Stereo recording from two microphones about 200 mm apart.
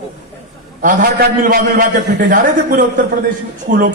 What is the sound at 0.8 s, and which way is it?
A man's voice, 45° right (ahead or behind).